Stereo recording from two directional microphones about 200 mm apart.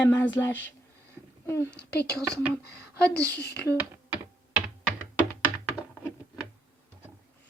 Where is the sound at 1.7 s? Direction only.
55° left (ahead or behind).